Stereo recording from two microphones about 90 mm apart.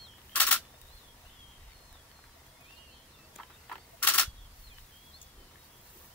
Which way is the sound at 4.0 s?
20° left (ahead or behind).